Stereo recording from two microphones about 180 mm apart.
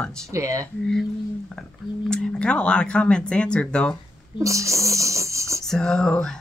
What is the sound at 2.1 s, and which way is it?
Speech, 5° left (ahead or behind).